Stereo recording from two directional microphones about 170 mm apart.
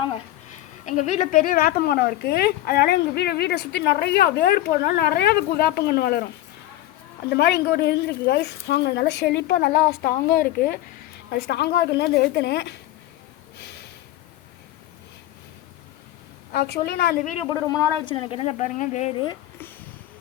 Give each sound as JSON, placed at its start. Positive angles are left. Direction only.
{"t": 0.9, "sound": "a woman's voice", "side_deg": 45}
{"t": 7.3, "sound": "a woman's voice", "side_deg": 75}
{"t": 11.3, "sound": "a woman's voice", "side_deg": 70}
{"t": 16.5, "sound": "a woman's voice", "side_deg": 70}
{"t": 17.7, "sound": "a woman's voice", "side_deg": 25}
{"t": 19.1, "sound": "speech", "side_deg": 25}